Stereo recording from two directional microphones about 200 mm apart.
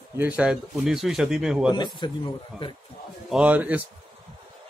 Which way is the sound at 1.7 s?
20° left (ahead or behind).